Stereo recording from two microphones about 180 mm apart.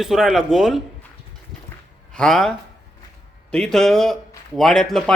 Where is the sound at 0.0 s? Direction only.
Centre (ahead or behind).